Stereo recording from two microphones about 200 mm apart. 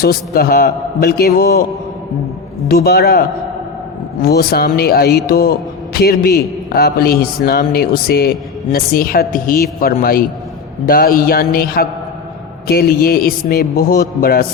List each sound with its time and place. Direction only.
0.0 s speech: 50° left (ahead or behind)
2.6 s speech: 50° left (ahead or behind)